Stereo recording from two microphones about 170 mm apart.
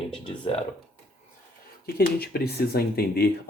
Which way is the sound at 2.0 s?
65° left (ahead or behind).